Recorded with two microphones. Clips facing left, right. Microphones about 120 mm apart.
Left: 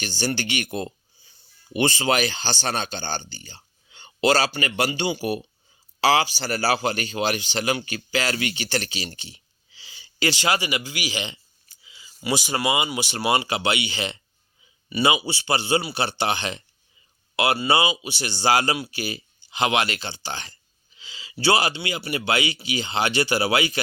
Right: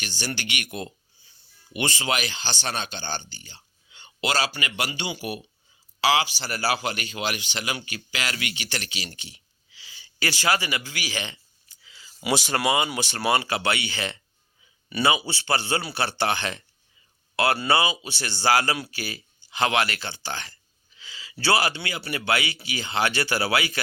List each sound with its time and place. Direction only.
0.0 s speech: 30° left (ahead or behind); by 11.3 s 15° left (ahead or behind)
11.8 s a sound: 10° left (ahead or behind)
12.2 s speech: centre (ahead or behind); by 23.8 s 20° left (ahead or behind)